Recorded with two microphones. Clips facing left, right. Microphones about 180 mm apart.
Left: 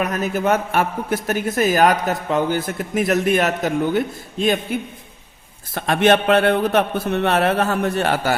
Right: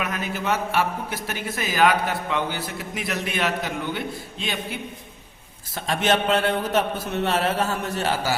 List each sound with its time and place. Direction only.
0.0 s a man's voice: 45° left (ahead or behind)
5.7 s a man's voice: 60° left (ahead or behind)